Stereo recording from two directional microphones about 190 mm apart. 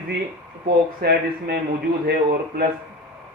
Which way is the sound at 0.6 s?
55° right (ahead or behind).